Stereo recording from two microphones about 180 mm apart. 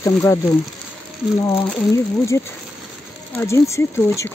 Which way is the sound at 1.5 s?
15° left (ahead or behind).